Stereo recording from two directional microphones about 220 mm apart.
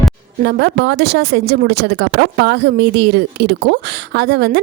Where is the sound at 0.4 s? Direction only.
50° right (ahead or behind).